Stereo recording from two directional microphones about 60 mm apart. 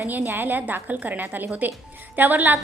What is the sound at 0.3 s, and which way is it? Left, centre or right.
A woman's voice, right.